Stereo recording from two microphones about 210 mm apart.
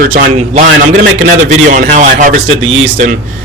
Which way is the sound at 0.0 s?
40° right (ahead or behind).